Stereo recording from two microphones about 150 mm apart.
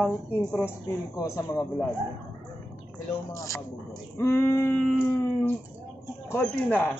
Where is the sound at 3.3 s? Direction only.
20° left (ahead or behind).